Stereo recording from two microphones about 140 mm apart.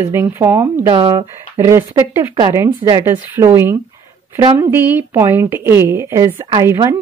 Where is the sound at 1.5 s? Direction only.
20° right (ahead or behind).